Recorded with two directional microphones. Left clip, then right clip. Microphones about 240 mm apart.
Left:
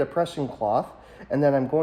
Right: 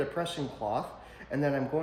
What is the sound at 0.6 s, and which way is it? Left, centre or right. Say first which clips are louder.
Speech: left 9 dB; left.